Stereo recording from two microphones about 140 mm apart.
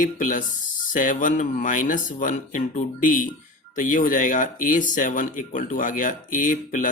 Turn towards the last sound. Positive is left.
turn(degrees=65)  # may be behind; listen again after turning